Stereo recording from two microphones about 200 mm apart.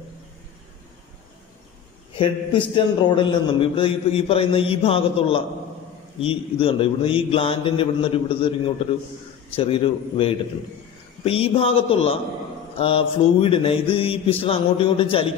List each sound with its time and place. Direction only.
2.1 s a man's voice: 25° left (ahead or behind)